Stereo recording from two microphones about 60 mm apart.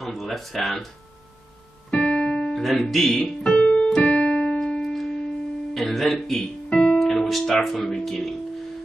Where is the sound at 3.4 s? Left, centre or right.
Centre.